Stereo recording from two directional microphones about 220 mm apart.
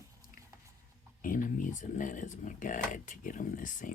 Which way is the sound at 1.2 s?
35° left (ahead or behind).